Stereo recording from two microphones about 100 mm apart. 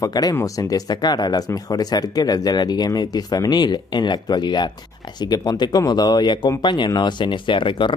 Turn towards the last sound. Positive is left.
turn(degrees=60)  # may be behind; listen again after turning